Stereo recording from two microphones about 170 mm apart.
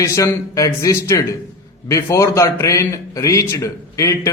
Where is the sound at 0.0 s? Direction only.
20° left (ahead or behind).